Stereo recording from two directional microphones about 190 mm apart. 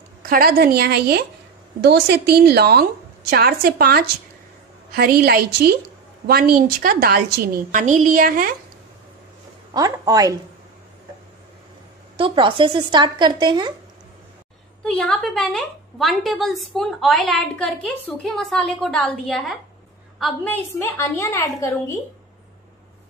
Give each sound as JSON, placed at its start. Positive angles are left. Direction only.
{"t": 0.2, "sound": "a woman's voice", "side_deg": -50}
{"t": 9.8, "sound": "speech", "side_deg": -20}
{"t": 12.2, "sound": "speech", "side_deg": -25}
{"t": 14.8, "sound": "a woman's voice", "side_deg": 5}